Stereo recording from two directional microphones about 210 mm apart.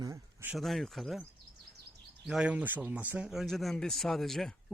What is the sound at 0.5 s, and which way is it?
Speech, centre (ahead or behind).